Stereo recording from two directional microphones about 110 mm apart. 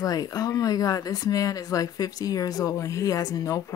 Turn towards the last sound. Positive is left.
turn(degrees=30)  # may be behind; listen again after turning